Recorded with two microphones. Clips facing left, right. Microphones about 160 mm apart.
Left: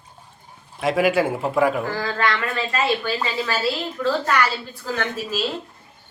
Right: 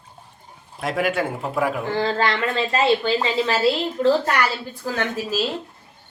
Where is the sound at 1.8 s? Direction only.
25° right (ahead or behind).